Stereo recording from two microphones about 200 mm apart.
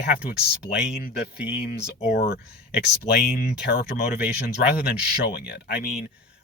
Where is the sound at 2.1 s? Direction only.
50° left (ahead or behind).